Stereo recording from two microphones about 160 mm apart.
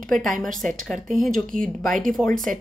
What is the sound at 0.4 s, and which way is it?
A woman's voice, 5° left (ahead or behind).